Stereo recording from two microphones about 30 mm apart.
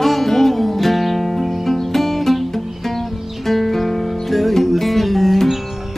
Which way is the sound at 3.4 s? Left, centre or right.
Centre.